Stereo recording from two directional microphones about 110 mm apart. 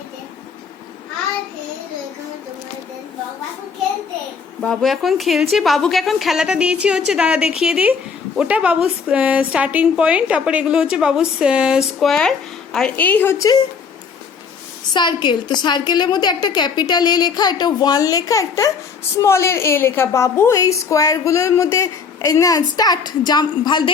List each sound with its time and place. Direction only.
4.6 s a woman's voice: 5° left (ahead or behind)
13.0 s a woman's voice: 15° left (ahead or behind)
14.9 s a woman's voice: 45° left (ahead or behind)